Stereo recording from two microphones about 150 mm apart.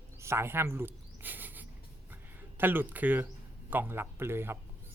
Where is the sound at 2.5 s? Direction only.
15° right (ahead or behind).